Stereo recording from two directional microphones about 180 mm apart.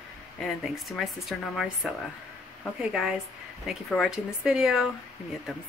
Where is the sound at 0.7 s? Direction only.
Centre (ahead or behind).